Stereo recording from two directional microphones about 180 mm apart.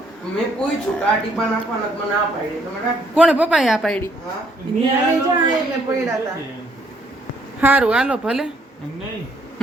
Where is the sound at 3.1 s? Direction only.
5° right (ahead or behind).